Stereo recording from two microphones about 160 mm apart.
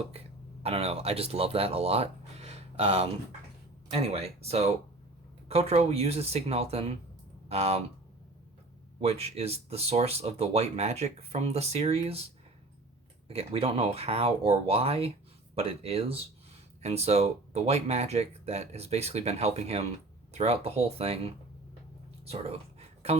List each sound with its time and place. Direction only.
0.6 s speech: 40° right (ahead or behind)
9.0 s speech: 40° right (ahead or behind)
13.2 s speech: 40° right (ahead or behind)